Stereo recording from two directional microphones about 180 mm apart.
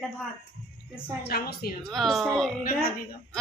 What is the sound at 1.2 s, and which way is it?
Speech, 60° left (ahead or behind).